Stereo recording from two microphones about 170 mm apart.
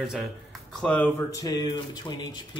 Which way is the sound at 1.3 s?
20° left (ahead or behind).